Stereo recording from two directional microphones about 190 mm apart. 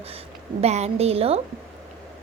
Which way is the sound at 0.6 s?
35° right (ahead or behind).